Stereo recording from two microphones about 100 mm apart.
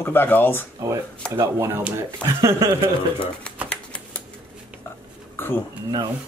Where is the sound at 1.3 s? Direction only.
30° right (ahead or behind).